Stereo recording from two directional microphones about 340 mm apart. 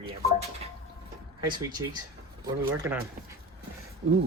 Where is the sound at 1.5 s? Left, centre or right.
Centre.